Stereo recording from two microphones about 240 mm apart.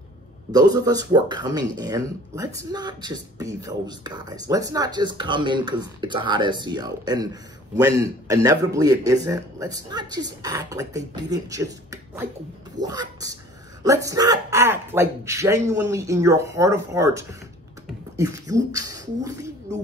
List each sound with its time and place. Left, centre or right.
0.5 s speech: centre